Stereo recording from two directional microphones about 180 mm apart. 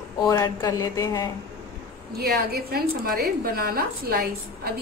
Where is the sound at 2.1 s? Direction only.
60° right (ahead or behind).